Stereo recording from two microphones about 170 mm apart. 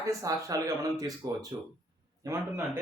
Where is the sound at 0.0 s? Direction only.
20° right (ahead or behind).